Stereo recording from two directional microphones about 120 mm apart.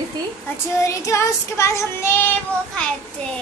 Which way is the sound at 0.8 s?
25° left (ahead or behind).